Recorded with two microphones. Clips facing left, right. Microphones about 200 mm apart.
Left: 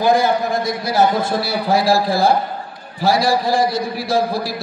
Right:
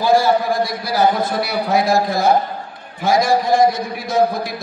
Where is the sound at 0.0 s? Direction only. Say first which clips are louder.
Right 1 dB; 20° left (ahead or behind).